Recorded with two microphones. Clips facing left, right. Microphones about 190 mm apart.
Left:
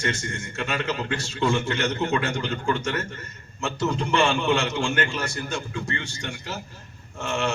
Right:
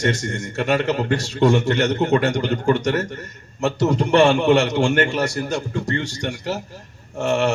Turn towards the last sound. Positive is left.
turn(degrees=-40)  # may be behind; listen again after turning